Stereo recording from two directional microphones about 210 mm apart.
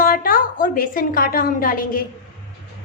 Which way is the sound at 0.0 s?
45° left (ahead or behind).